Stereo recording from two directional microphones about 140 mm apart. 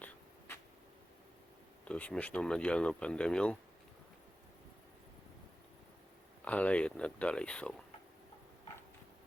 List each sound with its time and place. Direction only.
0.0 s a sound: 15° left (ahead or behind)
1.8 s speech: 10° left (ahead or behind)
6.4 s speech: 10° left (ahead or behind)